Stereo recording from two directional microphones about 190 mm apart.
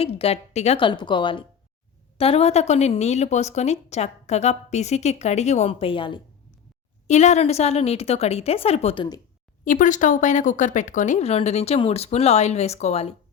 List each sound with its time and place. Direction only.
0.0 s a woman's voice: 30° left (ahead or behind)
7.1 s speech: 35° left (ahead or behind)
9.6 s speech: 45° left (ahead or behind)